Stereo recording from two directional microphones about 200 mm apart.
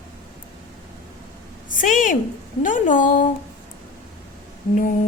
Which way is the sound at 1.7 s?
40° left (ahead or behind).